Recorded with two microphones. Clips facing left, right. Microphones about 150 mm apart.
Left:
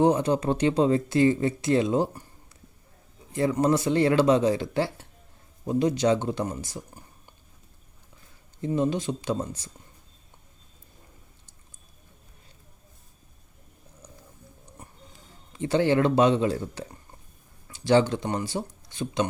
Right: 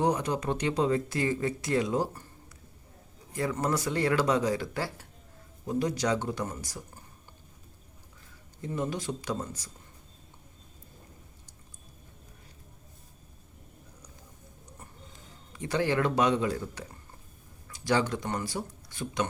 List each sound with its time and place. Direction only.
0.0 s speech: 30° left (ahead or behind)
3.5 s speech: 25° left (ahead or behind)
8.6 s speech: 25° left (ahead or behind)
15.5 s speech: 25° left (ahead or behind)